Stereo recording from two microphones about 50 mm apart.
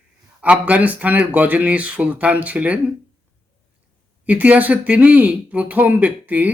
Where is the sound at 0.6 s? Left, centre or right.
Right.